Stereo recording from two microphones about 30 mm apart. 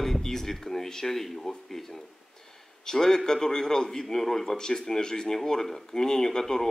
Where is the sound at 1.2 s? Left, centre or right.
Centre.